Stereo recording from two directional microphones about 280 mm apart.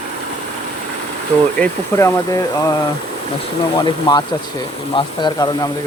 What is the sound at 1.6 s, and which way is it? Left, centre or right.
Speech, centre.